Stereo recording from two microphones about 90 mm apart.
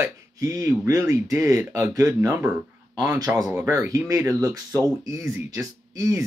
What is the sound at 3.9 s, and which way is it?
Speech, 35° right (ahead or behind).